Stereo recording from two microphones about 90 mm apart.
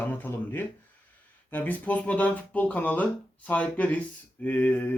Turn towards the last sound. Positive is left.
turn(degrees=20)  # may be behind; listen again after turning